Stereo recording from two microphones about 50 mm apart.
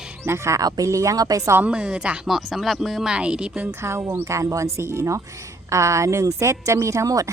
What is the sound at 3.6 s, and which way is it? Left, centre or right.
Speech, right.